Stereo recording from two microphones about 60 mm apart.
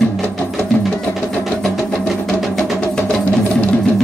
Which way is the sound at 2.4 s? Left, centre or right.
Centre.